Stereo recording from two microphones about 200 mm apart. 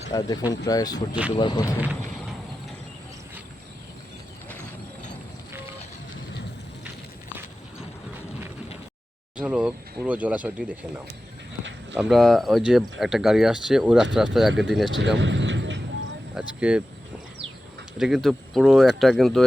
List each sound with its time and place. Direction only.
0.1 s speech: 20° left (ahead or behind)
9.4 s speech: 5° right (ahead or behind)
15.2 s vehicle: 65° right (ahead or behind)
16.3 s speech: 5° right (ahead or behind)
17.9 s speech: centre (ahead or behind)